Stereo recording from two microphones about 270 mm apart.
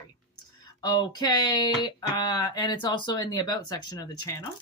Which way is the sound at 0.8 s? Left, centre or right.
Centre.